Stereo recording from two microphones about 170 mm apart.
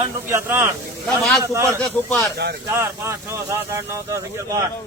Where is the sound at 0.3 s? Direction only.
15° right (ahead or behind).